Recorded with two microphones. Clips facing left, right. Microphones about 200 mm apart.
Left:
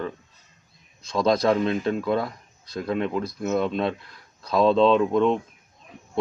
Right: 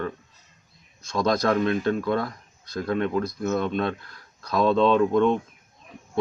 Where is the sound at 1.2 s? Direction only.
25° left (ahead or behind).